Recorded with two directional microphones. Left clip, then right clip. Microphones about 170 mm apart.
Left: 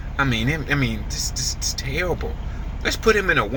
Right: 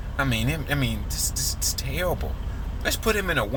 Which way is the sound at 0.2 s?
30° right (ahead or behind).